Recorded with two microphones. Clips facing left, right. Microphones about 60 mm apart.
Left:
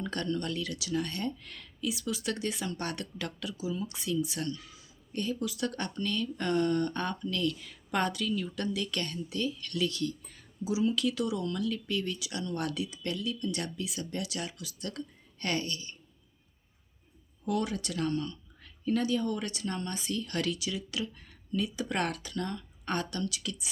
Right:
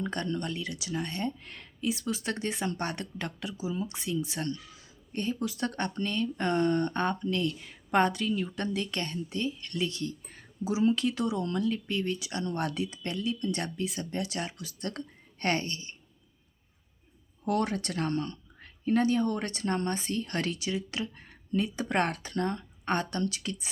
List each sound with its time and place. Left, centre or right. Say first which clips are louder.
0.0 s speech: right 1 dB; right
17.4 s speech: right 3 dB; right